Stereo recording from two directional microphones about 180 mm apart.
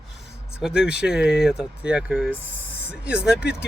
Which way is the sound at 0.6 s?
5° right (ahead or behind).